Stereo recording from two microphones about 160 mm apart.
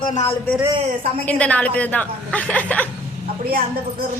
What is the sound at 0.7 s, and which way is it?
Speech, 35° right (ahead or behind).